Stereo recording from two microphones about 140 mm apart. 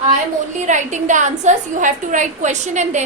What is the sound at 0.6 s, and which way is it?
A woman's voice, 60° right (ahead or behind).